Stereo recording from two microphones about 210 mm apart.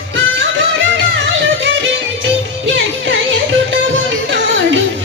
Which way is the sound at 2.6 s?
60° right (ahead or behind).